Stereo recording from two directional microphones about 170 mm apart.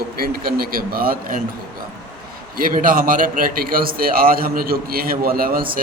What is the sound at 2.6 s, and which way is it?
A man's voice, 55° right (ahead or behind).